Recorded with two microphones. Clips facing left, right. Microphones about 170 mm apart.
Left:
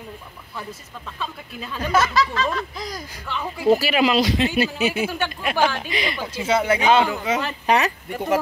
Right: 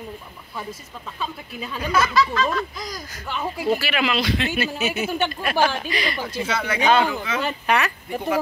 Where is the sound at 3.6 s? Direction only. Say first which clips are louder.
Left 6 dB; 40° left (ahead or behind).